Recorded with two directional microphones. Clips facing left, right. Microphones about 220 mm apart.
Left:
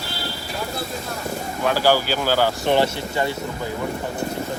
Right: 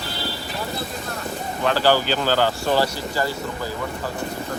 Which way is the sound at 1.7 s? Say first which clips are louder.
Even; 10° left (ahead or behind).